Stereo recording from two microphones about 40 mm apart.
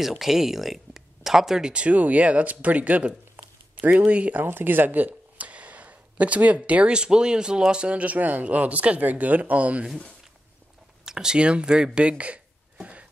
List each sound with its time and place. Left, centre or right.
0.2 s speech: centre
1.6 s speech: right
3.4 s a sound: right
3.8 s speech: right
4.4 s speech: right
5.4 s speech: right
11.1 s speech: centre; by 12.4 s right